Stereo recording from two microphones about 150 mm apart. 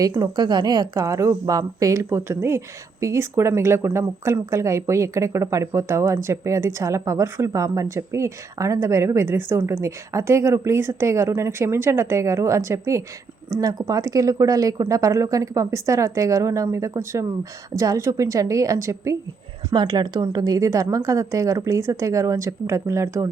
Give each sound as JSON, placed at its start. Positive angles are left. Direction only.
{"t": 0.2, "sound": "speech", "side_deg": -30}